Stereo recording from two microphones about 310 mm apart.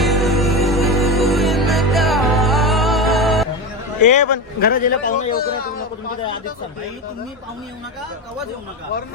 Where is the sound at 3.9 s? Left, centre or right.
Left.